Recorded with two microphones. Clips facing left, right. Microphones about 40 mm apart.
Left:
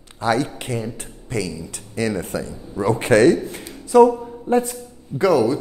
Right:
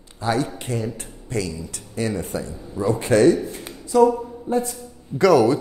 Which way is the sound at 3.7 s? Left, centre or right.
Centre.